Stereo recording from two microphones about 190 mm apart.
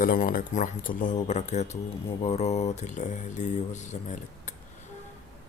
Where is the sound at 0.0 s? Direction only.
45° left (ahead or behind).